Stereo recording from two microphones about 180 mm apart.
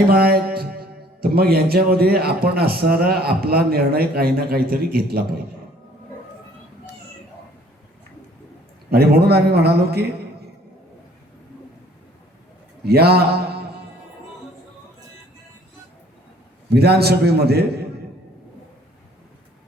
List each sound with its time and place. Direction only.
0.1 s a man's voice: 55° right (ahead or behind)
8.9 s a man's voice: 60° right (ahead or behind)
12.8 s a man's voice: 60° right (ahead or behind)
16.7 s a man's voice: 60° right (ahead or behind)